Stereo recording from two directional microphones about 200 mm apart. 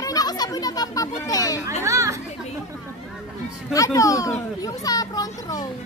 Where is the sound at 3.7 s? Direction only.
15° left (ahead or behind).